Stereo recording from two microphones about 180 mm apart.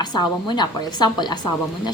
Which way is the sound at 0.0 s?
25° left (ahead or behind).